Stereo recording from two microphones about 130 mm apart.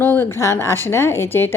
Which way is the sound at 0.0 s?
15° left (ahead or behind).